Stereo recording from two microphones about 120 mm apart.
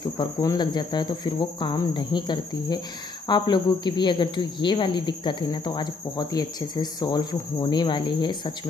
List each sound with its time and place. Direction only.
0.2 s speech: 35° left (ahead or behind)